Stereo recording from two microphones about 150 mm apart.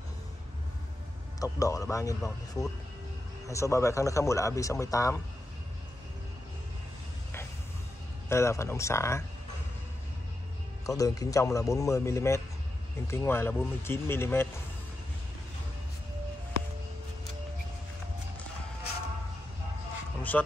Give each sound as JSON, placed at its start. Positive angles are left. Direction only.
{"t": 1.4, "sound": "a man's voice", "side_deg": 20}
{"t": 8.3, "sound": "a man's voice", "side_deg": 20}
{"t": 11.0, "sound": "a man's voice", "side_deg": 25}
{"t": 20.2, "sound": "a sound", "side_deg": 10}